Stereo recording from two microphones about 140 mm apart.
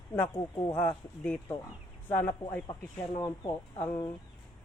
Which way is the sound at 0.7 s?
10° left (ahead or behind).